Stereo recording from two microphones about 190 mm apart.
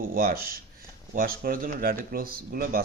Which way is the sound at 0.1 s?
50° right (ahead or behind).